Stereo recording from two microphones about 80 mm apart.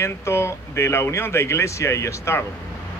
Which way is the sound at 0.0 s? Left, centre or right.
Left.